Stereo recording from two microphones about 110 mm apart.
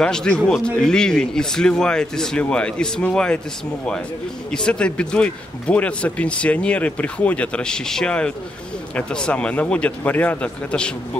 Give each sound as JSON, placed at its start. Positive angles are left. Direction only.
{"t": 0.0, "sound": "speech", "side_deg": 5}
{"t": 4.5, "sound": "speech", "side_deg": 10}